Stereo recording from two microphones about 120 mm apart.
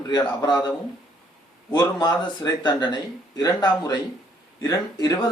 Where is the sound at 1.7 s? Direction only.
35° left (ahead or behind).